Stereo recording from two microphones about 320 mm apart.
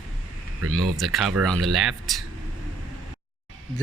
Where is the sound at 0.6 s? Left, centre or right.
Right.